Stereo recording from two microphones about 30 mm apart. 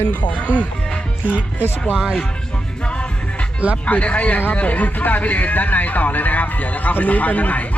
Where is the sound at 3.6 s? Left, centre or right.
Right.